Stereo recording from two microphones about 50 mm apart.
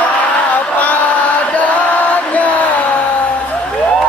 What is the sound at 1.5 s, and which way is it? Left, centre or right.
Chant, left.